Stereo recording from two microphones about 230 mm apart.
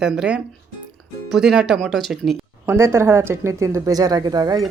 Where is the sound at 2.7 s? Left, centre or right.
Centre.